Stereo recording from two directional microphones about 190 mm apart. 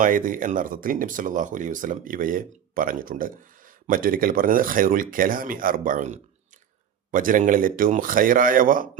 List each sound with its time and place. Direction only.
0.0 s speech: 45° right (ahead or behind)